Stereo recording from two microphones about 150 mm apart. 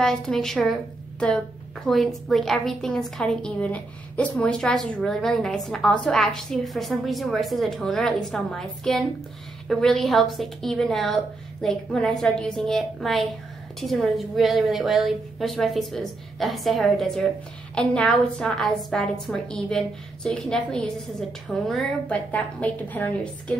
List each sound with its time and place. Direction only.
0.0 s a woman's voice: 5° left (ahead or behind)
1.9 s a woman's voice: centre (ahead or behind)